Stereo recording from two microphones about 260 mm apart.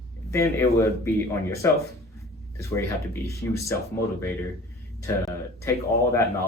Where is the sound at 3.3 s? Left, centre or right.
Centre.